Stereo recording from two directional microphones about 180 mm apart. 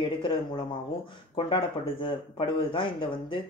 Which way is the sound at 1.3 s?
30° left (ahead or behind).